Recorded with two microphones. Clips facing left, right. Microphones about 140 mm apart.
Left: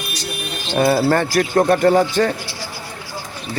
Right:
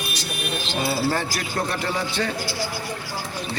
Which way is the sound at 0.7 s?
55° left (ahead or behind).